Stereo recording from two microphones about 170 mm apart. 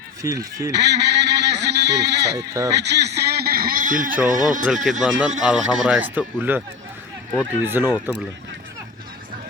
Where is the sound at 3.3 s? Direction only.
65° right (ahead or behind); by 4.7 s 50° right (ahead or behind).